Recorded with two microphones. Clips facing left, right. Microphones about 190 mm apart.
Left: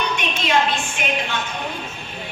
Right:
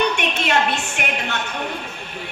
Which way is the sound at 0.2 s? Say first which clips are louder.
Even; 65° right (ahead or behind).